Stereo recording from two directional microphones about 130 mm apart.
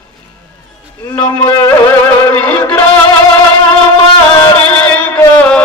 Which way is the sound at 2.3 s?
10° left (ahead or behind).